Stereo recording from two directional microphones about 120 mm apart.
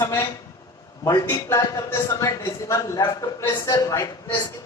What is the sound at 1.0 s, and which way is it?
A man's voice, 30° left (ahead or behind).